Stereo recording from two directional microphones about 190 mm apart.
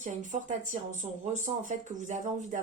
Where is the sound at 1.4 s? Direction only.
40° right (ahead or behind).